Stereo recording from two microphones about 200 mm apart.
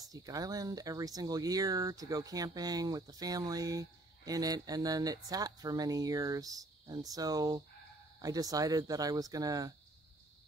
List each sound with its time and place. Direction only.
0.0 s speech: 20° right (ahead or behind)